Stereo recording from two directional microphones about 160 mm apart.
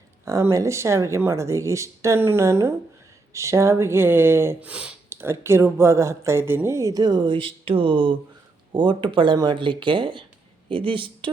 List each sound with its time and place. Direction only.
0.3 s speech: 20° right (ahead or behind)